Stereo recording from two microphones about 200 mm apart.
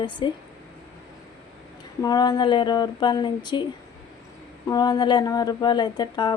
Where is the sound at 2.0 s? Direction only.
20° left (ahead or behind).